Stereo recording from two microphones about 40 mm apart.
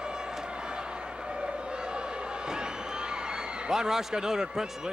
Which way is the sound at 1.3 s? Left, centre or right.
Centre.